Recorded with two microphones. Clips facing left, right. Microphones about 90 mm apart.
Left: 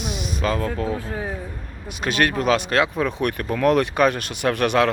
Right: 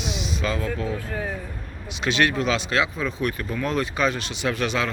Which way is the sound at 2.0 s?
45° left (ahead or behind).